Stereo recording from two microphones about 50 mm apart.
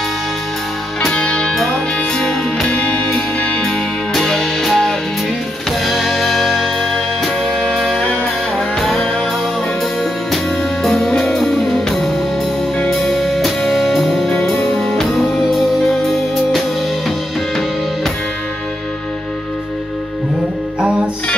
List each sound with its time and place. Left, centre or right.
1.1 s music: centre
1.5 s music: centre
2.1 s music: centre
2.7 s music: left
4.1 s music: centre
10.3 s music: centre
16.0 s music: centre